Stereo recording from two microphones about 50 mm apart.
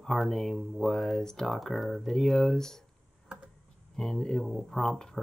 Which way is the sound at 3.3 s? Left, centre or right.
Centre.